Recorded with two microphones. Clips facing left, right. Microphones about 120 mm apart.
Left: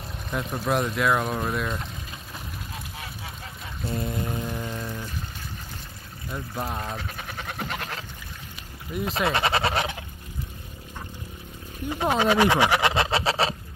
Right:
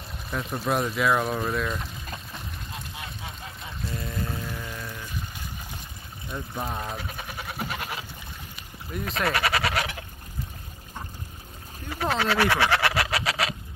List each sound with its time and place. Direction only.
0.3 s speech: centre (ahead or behind)
3.8 s music: 25° left (ahead or behind)
6.3 s sheep: centre (ahead or behind)
8.9 s speech: 5° left (ahead or behind)
9.3 s a sound: 25° left (ahead or behind)
11.9 s speech: 20° left (ahead or behind)